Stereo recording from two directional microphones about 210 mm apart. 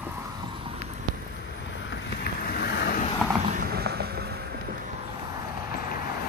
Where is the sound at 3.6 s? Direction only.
50° right (ahead or behind).